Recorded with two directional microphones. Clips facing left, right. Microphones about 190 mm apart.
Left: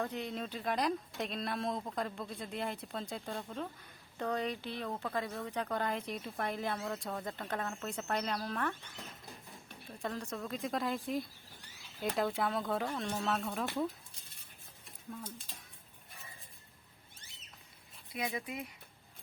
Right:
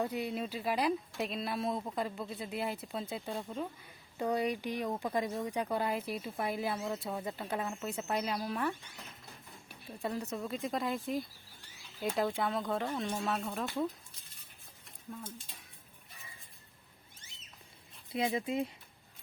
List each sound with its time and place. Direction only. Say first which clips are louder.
0.0 s speech: right 3 dB; 10° right (ahead or behind)
18.1 s speech: right 6 dB; 25° right (ahead or behind)